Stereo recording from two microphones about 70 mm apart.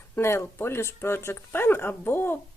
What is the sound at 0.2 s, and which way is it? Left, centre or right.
Speech, left.